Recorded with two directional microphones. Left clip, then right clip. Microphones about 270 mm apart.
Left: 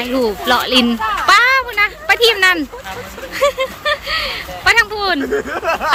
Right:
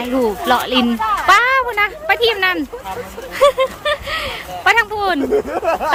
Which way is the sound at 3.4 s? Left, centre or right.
Centre.